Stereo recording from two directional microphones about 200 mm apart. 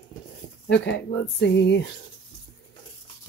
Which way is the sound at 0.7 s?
55° left (ahead or behind).